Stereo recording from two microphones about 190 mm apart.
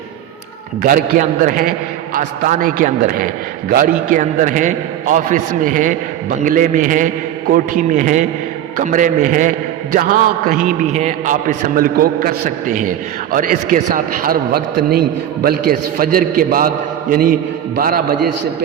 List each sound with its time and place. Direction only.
0.8 s a man's voice: 45° right (ahead or behind)